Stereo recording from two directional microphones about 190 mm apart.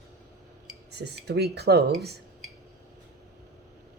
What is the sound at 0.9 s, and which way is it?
Speech, 60° right (ahead or behind).